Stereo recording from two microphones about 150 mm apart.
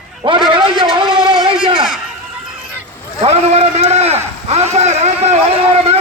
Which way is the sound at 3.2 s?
45° right (ahead or behind).